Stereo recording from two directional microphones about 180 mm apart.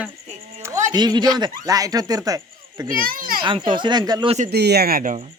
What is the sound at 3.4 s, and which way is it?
Speech, 25° right (ahead or behind).